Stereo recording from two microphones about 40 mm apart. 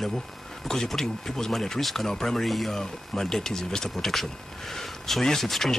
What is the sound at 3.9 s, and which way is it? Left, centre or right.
Speech, centre.